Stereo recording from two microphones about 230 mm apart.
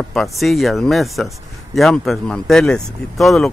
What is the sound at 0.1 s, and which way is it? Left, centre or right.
Speech, centre.